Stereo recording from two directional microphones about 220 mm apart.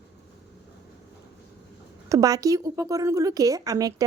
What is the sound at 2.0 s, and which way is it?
A woman's voice, 15° right (ahead or behind).